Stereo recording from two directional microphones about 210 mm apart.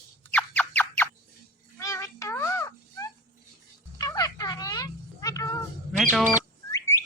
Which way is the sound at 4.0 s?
15° left (ahead or behind).